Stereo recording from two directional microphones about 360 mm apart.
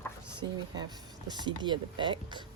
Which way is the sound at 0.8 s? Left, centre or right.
Centre.